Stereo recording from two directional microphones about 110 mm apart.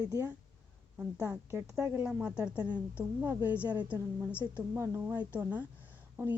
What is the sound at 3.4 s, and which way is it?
Speech, 20° left (ahead or behind).